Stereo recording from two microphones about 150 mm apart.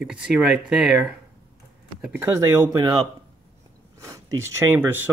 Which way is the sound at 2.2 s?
20° right (ahead or behind).